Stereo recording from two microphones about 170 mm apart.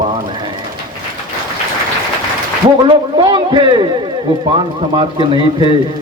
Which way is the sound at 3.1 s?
25° right (ahead or behind).